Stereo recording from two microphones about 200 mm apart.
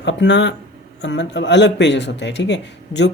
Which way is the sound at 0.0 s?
65° left (ahead or behind).